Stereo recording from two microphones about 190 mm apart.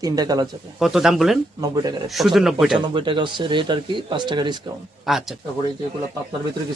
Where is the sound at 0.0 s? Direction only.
20° right (ahead or behind).